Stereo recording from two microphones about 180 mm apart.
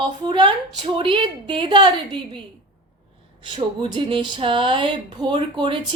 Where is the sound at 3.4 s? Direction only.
25° right (ahead or behind).